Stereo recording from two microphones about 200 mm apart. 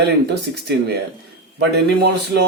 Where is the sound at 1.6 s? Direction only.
55° right (ahead or behind).